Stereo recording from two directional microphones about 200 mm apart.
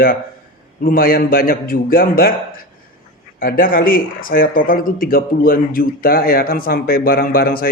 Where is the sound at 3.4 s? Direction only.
45° left (ahead or behind).